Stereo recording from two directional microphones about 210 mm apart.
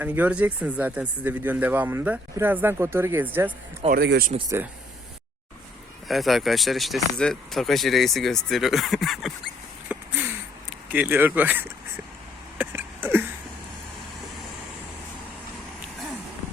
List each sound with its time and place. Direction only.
0.0 s speech: 5° right (ahead or behind)
3.8 s speech: 50° right (ahead or behind)
4.4 s speech: 15° right (ahead or behind)
6.1 s speech: centre (ahead or behind)
9.9 s a sound: 5° right (ahead or behind)
10.9 s speech: 10° right (ahead or behind)
12.5 s a sound: 10° right (ahead or behind)